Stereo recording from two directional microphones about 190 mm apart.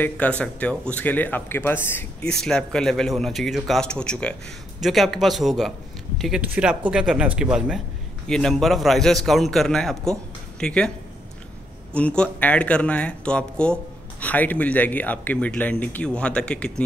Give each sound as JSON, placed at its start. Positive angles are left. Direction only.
{"t": 0.0, "sound": "speech", "side_deg": 5}
{"t": 11.9, "sound": "speech", "side_deg": 5}